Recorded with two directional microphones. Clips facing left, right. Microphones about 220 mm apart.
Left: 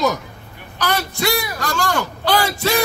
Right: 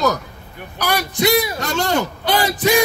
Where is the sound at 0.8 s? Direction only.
15° right (ahead or behind).